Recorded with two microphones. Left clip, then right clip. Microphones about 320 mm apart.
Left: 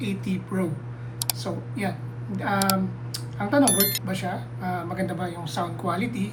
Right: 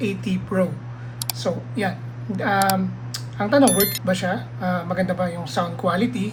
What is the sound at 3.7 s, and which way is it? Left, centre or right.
Speech, centre.